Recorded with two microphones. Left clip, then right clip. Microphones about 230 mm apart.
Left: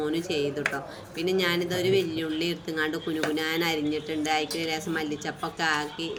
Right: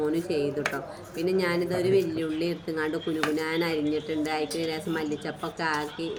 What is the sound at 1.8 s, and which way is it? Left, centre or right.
Speech, left.